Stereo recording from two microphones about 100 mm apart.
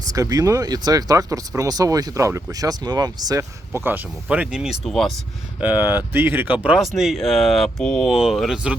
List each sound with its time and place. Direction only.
0.1 s speech: 35° right (ahead or behind)
3.7 s speech: 20° right (ahead or behind); by 5.2 s 5° left (ahead or behind)
5.5 s speech: 15° right (ahead or behind)
6.7 s speech: centre (ahead or behind)